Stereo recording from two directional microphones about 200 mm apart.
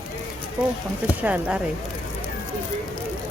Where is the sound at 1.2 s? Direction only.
5° right (ahead or behind).